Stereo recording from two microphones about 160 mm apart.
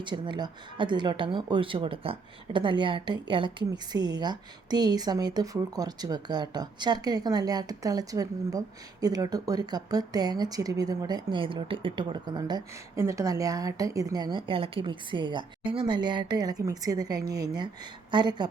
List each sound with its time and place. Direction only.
0.0 s speech: 30° right (ahead or behind)